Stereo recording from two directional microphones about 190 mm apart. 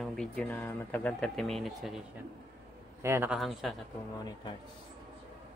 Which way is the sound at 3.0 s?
10° right (ahead or behind).